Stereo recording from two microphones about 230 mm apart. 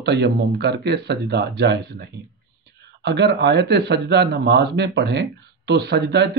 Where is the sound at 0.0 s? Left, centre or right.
Right.